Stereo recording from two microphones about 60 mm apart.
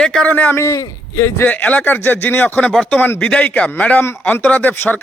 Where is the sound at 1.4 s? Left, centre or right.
Left.